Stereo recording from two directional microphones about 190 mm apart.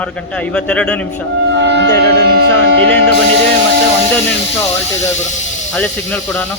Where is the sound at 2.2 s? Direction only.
55° right (ahead or behind).